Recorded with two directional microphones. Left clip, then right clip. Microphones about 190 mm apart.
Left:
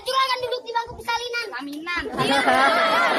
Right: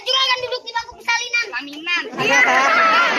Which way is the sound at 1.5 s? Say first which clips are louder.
Right 6 dB; centre (ahead or behind).